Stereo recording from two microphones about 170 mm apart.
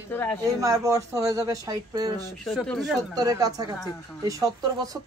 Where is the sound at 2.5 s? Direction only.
Centre (ahead or behind).